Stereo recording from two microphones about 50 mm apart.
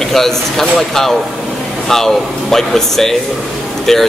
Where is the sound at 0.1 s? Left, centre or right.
Centre.